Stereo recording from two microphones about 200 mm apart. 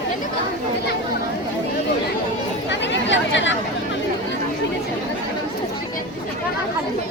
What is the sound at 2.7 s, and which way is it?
Chatter, 60° left (ahead or behind).